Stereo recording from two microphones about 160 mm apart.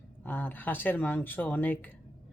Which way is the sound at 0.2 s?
10° left (ahead or behind).